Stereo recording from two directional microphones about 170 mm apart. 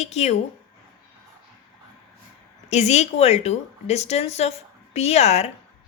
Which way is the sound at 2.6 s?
40° left (ahead or behind).